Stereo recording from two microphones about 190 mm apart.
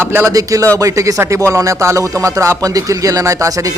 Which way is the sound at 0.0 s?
10° right (ahead or behind).